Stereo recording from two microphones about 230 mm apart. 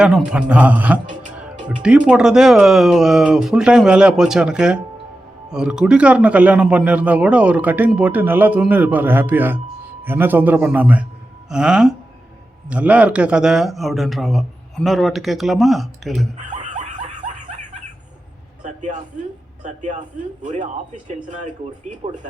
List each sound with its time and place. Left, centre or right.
0.0 s a man's voice: centre
16.4 s snicker: right
18.6 s a sound: right
19.6 s speech: right